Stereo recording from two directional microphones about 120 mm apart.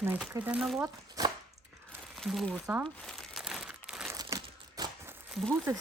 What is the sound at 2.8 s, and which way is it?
Crumpling, 5° left (ahead or behind).